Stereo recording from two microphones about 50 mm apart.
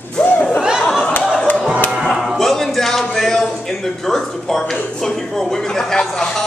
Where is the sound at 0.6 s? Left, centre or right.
Centre.